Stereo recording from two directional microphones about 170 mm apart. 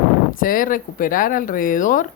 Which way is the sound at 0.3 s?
55° left (ahead or behind).